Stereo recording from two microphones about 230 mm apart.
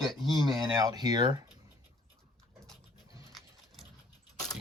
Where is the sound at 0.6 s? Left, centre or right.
Centre.